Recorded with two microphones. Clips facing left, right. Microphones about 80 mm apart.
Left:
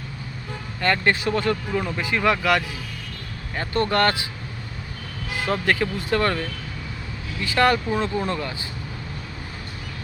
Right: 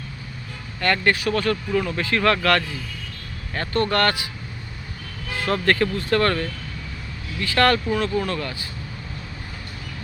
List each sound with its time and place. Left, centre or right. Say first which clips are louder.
0.8 s speech: even; left
5.3 s speech: right 2 dB; centre
7.4 s speech: right 1 dB; centre